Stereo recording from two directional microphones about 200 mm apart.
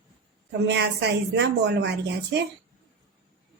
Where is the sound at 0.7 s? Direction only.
60° right (ahead or behind).